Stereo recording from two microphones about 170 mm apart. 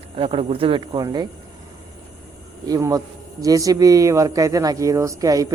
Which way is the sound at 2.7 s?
20° right (ahead or behind).